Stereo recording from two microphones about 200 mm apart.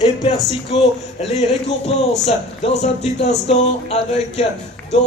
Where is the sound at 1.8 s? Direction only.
30° left (ahead or behind).